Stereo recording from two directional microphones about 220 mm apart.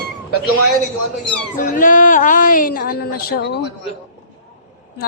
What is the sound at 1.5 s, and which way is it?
Speech, 35° left (ahead or behind).